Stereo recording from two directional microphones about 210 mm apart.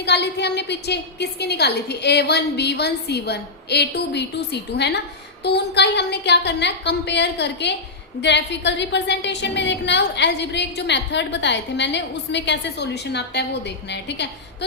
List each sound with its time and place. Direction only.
0.0 s a woman's voice: 55° left (ahead or behind)